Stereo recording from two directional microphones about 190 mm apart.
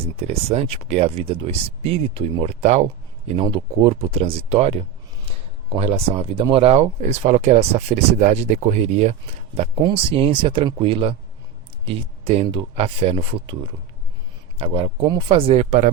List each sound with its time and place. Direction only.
0.0 s speech: 30° right (ahead or behind)